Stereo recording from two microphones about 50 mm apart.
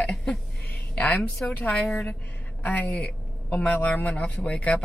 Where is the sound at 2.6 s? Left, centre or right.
Left.